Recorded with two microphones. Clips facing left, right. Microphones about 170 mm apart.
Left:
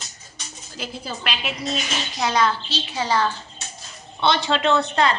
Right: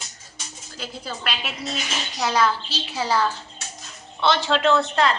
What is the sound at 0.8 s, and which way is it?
A woman's voice, 5° left (ahead or behind).